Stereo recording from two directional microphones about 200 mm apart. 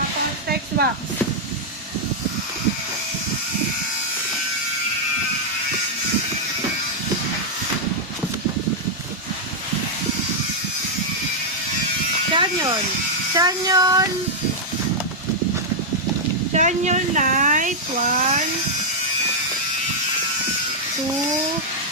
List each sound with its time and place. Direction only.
12.3 s electric shaver: 20° right (ahead or behind)
13.3 s a sound: 20° right (ahead or behind)
16.5 s speech: 35° right (ahead or behind)